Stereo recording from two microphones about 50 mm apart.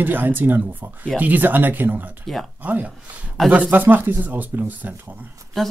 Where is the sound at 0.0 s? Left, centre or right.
Right.